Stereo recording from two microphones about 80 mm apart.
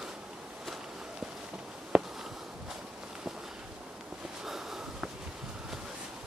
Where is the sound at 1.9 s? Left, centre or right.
Centre.